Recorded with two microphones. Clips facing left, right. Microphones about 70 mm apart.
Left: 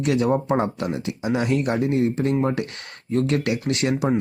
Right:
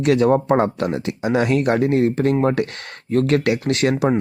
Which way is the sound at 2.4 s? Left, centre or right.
Right.